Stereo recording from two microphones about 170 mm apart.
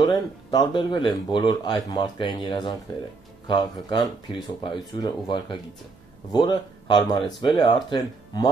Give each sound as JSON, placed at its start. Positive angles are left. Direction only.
{"t": 0.0, "sound": "speech", "side_deg": 25}